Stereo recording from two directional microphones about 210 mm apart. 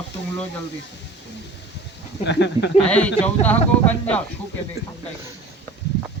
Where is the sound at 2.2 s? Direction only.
55° left (ahead or behind).